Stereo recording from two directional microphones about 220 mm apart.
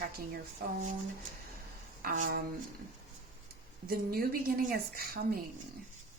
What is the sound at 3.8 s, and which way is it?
Speech, 45° right (ahead or behind).